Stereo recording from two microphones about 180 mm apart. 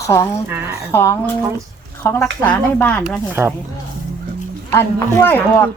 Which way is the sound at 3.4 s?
15° right (ahead or behind).